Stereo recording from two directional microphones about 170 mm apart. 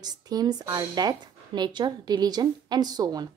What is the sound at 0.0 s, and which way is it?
Speech, 25° right (ahead or behind).